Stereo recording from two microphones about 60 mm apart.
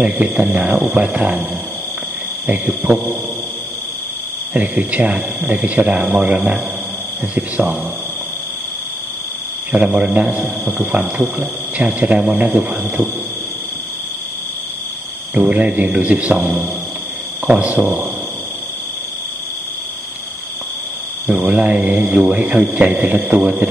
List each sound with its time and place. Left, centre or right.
0.0 s speech: right
2.4 s speech: right
4.6 s speech: right
9.7 s speech: right
15.3 s speech: right
21.3 s speech: right